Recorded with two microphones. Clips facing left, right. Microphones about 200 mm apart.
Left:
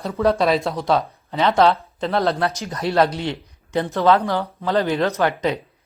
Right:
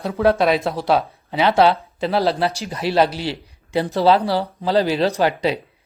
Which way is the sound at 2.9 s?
30° right (ahead or behind).